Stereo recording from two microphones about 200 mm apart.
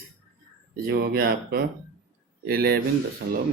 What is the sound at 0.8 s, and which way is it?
A man's voice, 50° right (ahead or behind).